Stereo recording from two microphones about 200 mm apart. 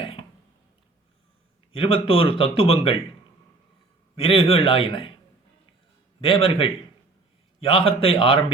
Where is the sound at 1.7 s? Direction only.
30° left (ahead or behind).